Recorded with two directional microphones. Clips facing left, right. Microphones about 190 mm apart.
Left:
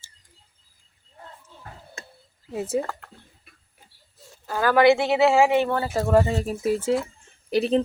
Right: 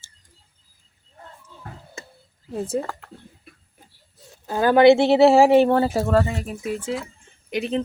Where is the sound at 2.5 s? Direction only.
5° left (ahead or behind).